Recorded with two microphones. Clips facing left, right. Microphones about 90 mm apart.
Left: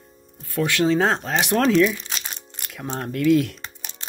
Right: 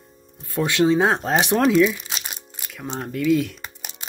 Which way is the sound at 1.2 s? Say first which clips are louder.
Right 3 dB; 30° right (ahead or behind).